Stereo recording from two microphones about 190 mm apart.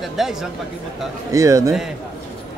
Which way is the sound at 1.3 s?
15° right (ahead or behind).